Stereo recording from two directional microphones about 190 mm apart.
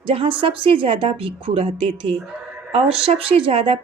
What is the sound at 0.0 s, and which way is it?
Speech, 30° right (ahead or behind).